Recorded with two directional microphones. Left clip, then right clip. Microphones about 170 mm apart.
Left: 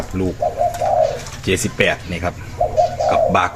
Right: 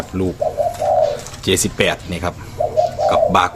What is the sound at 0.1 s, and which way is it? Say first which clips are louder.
Speech: right 1 dB; 15° right (ahead or behind).